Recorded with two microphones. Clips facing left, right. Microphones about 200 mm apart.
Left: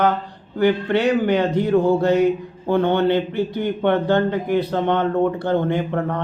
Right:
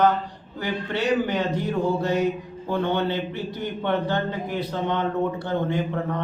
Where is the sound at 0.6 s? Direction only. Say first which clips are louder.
Left 9 dB; 60° left (ahead or behind).